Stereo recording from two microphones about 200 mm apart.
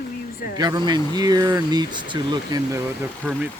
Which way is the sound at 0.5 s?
20° right (ahead or behind).